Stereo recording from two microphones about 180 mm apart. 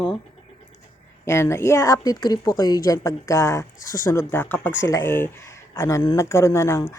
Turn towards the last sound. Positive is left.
turn(degrees=15)  # may be behind; listen again after turning